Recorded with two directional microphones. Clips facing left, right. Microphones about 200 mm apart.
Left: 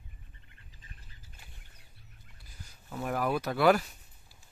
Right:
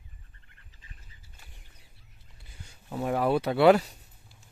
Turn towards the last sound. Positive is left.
turn(degrees=-30)  # may be behind; listen again after turning